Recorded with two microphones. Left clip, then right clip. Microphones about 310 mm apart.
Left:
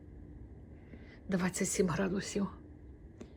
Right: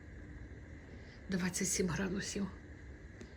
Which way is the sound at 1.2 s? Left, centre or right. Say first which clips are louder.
Left 3 dB; centre.